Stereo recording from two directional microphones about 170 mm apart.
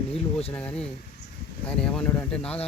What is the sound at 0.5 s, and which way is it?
Speech, 5° left (ahead or behind).